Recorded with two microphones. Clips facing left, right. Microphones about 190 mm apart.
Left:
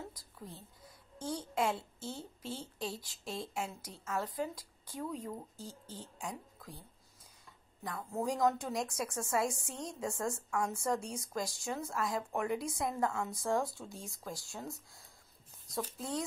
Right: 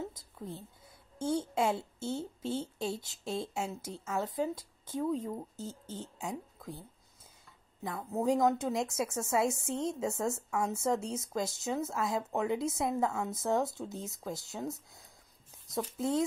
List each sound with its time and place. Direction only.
0.1 s a child's voice: 25° right (ahead or behind)
7.8 s speech: 20° right (ahead or behind)